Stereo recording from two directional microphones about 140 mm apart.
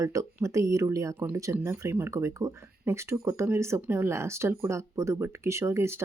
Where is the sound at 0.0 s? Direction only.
25° right (ahead or behind).